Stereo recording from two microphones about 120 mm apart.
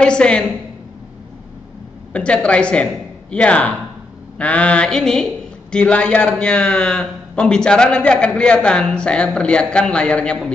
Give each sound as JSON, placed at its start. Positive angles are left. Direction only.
{"t": 0.0, "sound": "a woman's voice", "side_deg": 5}
{"t": 2.1, "sound": "a woman's voice", "side_deg": 10}